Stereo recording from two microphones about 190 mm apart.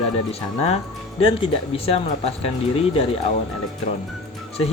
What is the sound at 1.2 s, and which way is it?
Speech, 30° left (ahead or behind).